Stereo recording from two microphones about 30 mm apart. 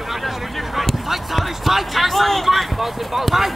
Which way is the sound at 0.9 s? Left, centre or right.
Centre.